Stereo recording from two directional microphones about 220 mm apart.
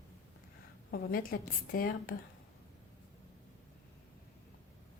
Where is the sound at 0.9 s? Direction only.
40° left (ahead or behind).